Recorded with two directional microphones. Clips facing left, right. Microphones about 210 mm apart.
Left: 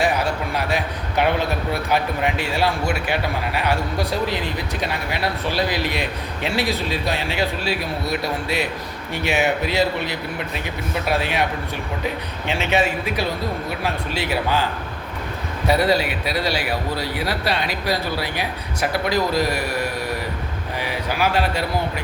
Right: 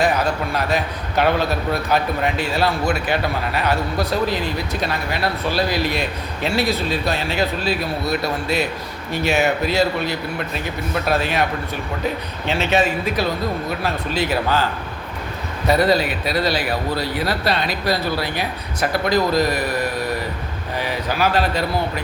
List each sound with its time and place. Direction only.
0.7 s a man's voice: 15° left (ahead or behind)
12.7 s a man's voice: 10° left (ahead or behind)